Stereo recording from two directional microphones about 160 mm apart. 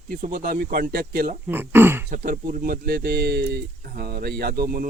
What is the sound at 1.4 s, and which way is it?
Speech, 15° right (ahead or behind).